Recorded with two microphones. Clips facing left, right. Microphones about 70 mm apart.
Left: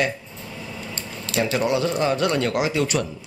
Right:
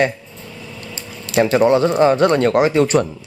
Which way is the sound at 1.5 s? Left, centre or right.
Right.